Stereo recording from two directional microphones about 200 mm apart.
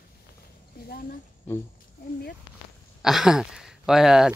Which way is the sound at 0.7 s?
50° left (ahead or behind).